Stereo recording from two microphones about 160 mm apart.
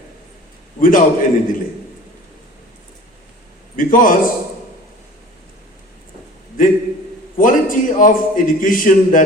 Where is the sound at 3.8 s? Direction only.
55° left (ahead or behind).